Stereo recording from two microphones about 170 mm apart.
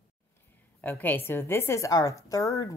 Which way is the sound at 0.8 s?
10° left (ahead or behind).